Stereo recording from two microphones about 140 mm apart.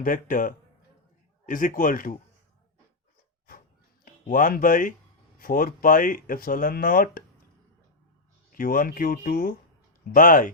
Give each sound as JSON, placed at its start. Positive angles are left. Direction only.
{"t": 0.0, "sound": "speech", "side_deg": 75}
{"t": 4.0, "sound": "speech", "side_deg": 80}
{"t": 5.4, "sound": "speech", "side_deg": 90}
{"t": 8.5, "sound": "speech", "side_deg": 80}
{"t": 10.2, "sound": "speech", "side_deg": 80}